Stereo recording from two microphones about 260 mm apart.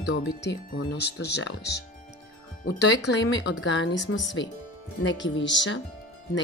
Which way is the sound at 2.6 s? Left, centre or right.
Left.